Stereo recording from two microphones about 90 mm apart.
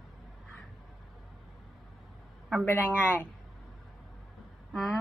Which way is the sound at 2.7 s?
25° left (ahead or behind).